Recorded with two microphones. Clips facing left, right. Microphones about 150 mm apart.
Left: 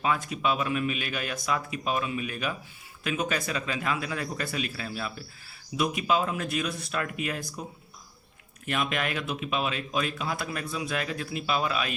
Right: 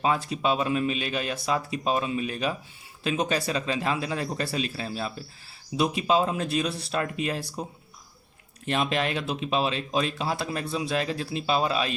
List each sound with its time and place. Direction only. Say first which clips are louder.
0.0 s speech: right 2 dB; 30° right (ahead or behind)
8.6 s speech: right 3 dB; 30° right (ahead or behind)